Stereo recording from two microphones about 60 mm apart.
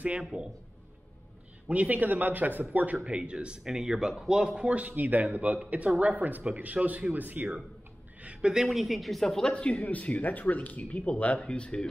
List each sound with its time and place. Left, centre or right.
0.2 s speech: centre
1.7 s speech: right
8.2 s a sound: centre
8.6 s speech: centre
9.5 s speech: left